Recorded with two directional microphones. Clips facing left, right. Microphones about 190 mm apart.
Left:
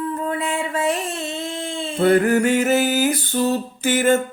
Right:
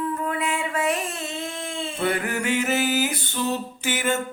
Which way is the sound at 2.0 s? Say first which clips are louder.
Left 10 dB; 40° left (ahead or behind).